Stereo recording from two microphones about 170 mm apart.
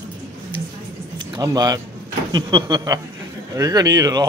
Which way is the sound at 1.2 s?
20° right (ahead or behind).